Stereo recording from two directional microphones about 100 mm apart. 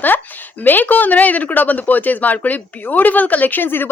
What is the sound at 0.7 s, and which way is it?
Speech, 15° left (ahead or behind).